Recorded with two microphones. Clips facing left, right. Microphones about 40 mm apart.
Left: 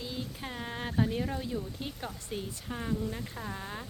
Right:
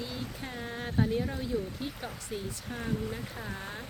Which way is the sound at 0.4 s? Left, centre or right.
Centre.